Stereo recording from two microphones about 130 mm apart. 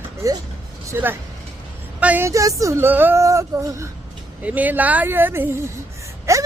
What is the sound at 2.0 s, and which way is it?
Speech, 10° right (ahead or behind).